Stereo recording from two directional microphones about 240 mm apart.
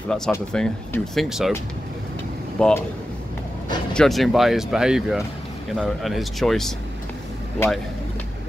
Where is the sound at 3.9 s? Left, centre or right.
Centre.